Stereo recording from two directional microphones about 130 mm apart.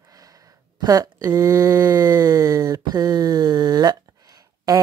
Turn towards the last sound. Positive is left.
turn(degrees=-30)  # may be behind; listen again after turning